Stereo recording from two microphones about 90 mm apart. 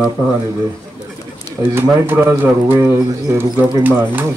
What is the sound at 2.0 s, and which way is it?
Speech, 25° right (ahead or behind).